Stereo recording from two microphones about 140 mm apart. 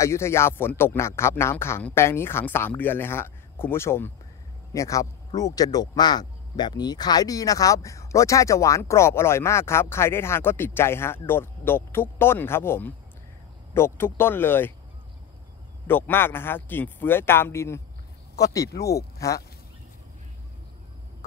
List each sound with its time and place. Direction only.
0.0 s a man's voice: 20° left (ahead or behind)
15.9 s a man's voice: 15° left (ahead or behind)